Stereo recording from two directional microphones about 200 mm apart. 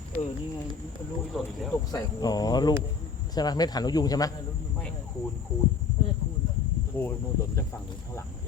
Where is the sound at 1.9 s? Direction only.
20° left (ahead or behind).